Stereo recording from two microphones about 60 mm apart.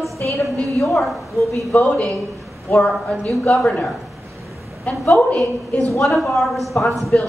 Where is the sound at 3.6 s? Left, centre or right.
Centre.